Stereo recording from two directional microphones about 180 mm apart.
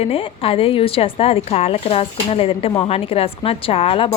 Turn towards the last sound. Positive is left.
turn(degrees=30)  # may be behind; listen again after turning